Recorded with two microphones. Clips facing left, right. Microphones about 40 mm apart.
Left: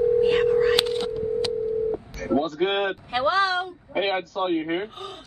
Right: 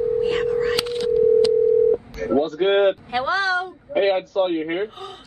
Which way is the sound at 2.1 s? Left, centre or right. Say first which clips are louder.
Right 3 dB; right.